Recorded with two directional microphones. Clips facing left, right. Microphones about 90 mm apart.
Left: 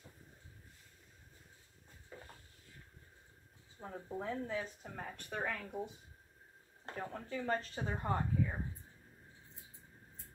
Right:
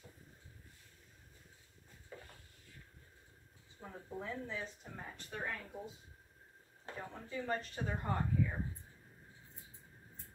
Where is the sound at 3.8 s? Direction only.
35° left (ahead or behind).